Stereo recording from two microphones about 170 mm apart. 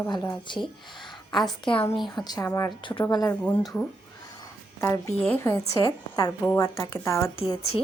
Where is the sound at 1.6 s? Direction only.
30° left (ahead or behind); by 3.6 s 15° left (ahead or behind).